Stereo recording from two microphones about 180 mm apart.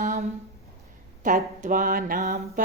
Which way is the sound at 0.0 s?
40° right (ahead or behind).